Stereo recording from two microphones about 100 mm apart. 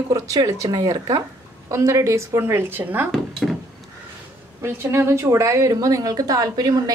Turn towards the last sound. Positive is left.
turn(degrees=-40)  # may be behind; listen again after turning